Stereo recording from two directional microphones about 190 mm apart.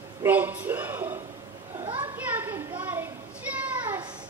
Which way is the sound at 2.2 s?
10° right (ahead or behind).